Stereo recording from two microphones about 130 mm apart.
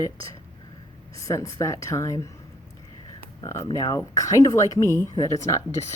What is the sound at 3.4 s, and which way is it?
Speech, 20° left (ahead or behind).